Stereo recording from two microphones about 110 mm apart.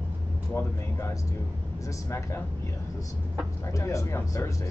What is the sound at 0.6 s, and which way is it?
Speech, 25° left (ahead or behind).